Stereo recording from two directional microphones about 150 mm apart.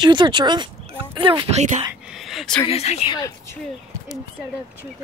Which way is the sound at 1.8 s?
10° right (ahead or behind).